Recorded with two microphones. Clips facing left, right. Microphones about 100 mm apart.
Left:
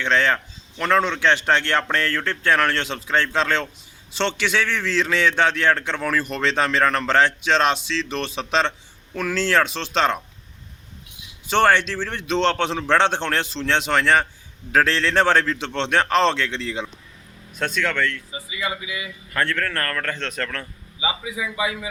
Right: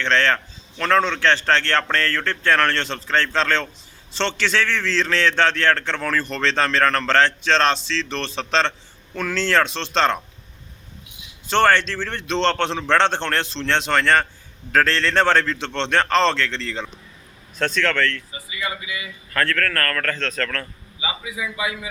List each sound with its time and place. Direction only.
0.0 s a man's voice: 10° left (ahead or behind)
11.4 s a man's voice: 10° left (ahead or behind)